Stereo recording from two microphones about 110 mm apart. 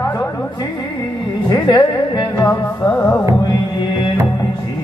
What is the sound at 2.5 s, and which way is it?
Music, 15° left (ahead or behind).